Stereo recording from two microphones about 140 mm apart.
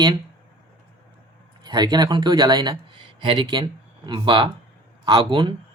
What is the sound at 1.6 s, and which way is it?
Speech, 30° right (ahead or behind).